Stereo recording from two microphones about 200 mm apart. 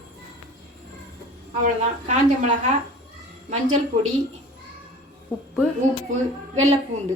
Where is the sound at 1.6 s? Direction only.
40° right (ahead or behind).